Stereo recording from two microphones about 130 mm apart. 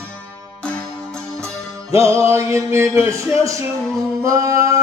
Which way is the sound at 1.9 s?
20° right (ahead or behind).